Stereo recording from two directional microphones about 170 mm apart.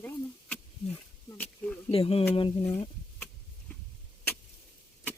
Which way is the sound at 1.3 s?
10° left (ahead or behind).